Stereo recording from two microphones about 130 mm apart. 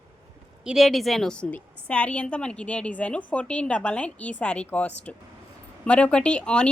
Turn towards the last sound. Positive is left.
turn(degrees=5)  # may be behind; listen again after turning